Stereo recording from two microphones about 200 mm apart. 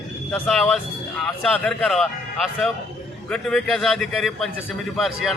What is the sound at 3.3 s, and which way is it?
A man's voice, 5° left (ahead or behind).